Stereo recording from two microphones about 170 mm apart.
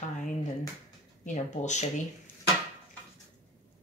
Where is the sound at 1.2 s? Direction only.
45° left (ahead or behind).